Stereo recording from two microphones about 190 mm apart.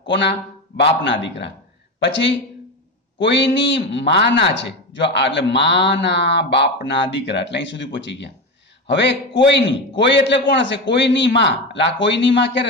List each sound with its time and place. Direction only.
0.1 s a man's voice: 65° left (ahead or behind)